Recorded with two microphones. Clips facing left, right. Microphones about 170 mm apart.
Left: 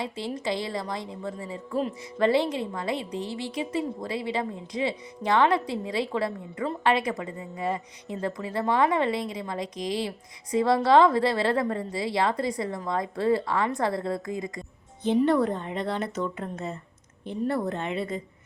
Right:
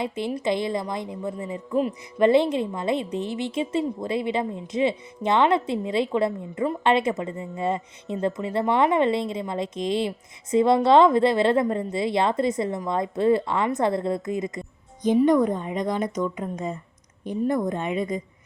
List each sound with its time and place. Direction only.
0.0 s a woman's voice: 20° right (ahead or behind)